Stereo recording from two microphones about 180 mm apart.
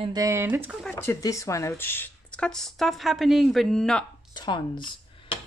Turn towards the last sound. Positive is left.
turn(degrees=30)  # may be behind; listen again after turning